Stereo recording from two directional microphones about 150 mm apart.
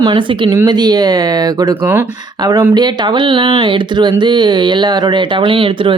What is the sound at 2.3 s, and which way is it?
Speech, 25° right (ahead or behind).